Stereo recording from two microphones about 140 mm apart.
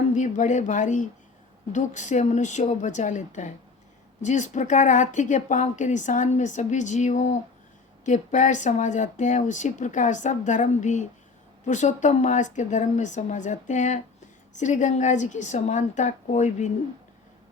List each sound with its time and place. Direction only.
0.1 s a woman's voice: 60° left (ahead or behind)